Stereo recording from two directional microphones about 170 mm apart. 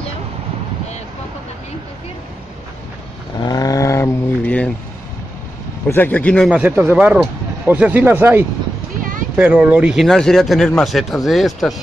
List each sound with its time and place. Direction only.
3.3 s a sound: 20° left (ahead or behind)
5.9 s speech: 10° left (ahead or behind)
6.5 s speech: 10° right (ahead or behind)